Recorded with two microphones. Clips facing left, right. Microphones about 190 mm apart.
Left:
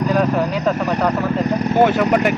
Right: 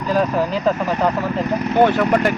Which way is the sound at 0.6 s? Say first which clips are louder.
Even; 5° right (ahead or behind).